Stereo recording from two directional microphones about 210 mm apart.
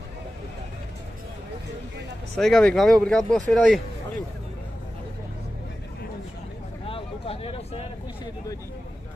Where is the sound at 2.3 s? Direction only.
Centre (ahead or behind).